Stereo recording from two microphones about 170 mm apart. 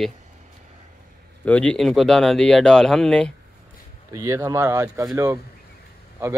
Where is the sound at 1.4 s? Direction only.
5° left (ahead or behind).